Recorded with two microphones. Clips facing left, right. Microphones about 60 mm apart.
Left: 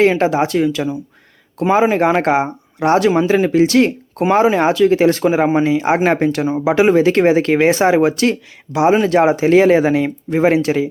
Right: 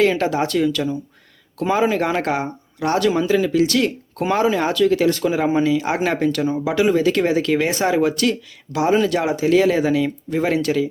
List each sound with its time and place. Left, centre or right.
0.0 s speech: left